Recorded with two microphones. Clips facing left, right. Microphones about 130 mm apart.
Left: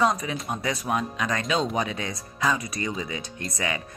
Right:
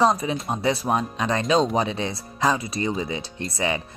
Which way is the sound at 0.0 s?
30° right (ahead or behind).